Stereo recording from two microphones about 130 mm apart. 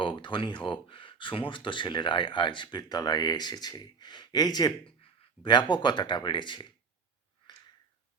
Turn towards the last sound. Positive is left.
turn(degrees=35)  # may be behind; listen again after turning